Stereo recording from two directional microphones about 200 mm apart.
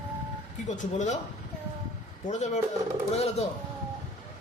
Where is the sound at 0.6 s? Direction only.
35° left (ahead or behind).